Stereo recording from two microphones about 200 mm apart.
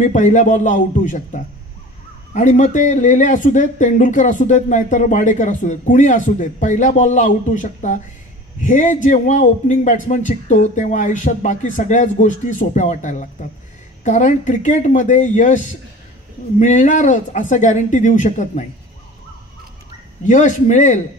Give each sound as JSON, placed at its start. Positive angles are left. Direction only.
{"t": 0.0, "sound": "speech", "side_deg": 40}
{"t": 20.2, "sound": "speech", "side_deg": 40}